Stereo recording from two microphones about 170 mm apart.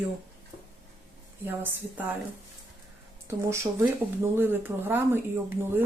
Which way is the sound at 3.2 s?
15° right (ahead or behind).